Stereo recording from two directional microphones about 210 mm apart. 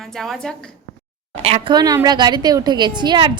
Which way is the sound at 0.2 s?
Centre (ahead or behind).